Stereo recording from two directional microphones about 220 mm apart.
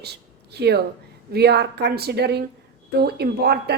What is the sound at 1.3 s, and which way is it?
A woman's voice, 50° right (ahead or behind).